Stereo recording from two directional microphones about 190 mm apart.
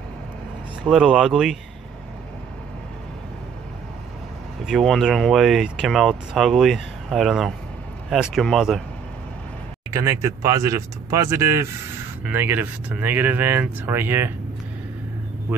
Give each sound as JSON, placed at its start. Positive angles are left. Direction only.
{"t": 0.8, "sound": "speech", "side_deg": -5}
{"t": 4.6, "sound": "speech", "side_deg": 0}
{"t": 9.9, "sound": "speech", "side_deg": -15}